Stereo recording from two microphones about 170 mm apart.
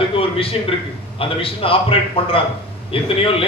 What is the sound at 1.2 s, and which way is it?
A man's voice, 35° left (ahead or behind).